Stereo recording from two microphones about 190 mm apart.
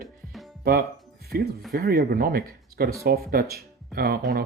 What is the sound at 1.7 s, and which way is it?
Speech, 50° right (ahead or behind).